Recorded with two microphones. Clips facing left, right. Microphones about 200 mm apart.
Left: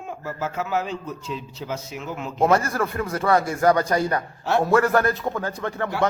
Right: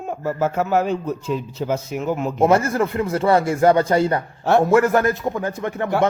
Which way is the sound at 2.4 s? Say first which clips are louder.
Right 3 dB; 25° right (ahead or behind).